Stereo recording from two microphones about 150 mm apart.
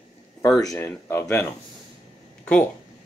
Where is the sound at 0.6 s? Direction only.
20° left (ahead or behind).